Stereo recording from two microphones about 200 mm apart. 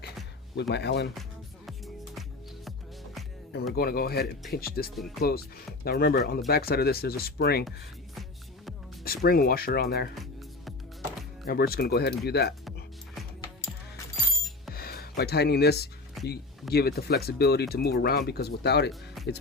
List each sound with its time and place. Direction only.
0.7 s speech: 55° left (ahead or behind)
3.8 s speech: 50° left (ahead or behind)
4.9 s speech: centre (ahead or behind)
5.8 s speech: 50° left (ahead or behind)
9.0 s speech: 50° left (ahead or behind)
11.4 s speech: 50° left (ahead or behind)
14.7 s music: 50° left (ahead or behind)
16.2 s a sound: centre (ahead or behind)
16.7 s speech: 50° left (ahead or behind)
18.9 s music: centre (ahead or behind)